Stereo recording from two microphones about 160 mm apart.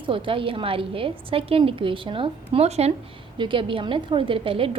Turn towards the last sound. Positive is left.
turn(degrees=-35)  # may be behind; listen again after turning